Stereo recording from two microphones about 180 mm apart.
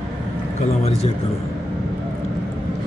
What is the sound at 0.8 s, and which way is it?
Speech, 35° left (ahead or behind).